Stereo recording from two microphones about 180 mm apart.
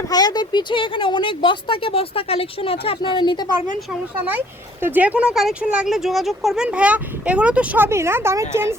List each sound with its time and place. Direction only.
0.1 s speech: 20° left (ahead or behind)
4.3 s speech: 10° right (ahead or behind)